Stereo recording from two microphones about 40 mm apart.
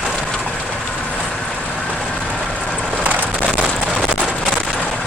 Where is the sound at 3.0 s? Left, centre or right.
Right.